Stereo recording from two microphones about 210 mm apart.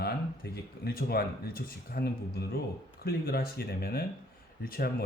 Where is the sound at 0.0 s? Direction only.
50° left (ahead or behind).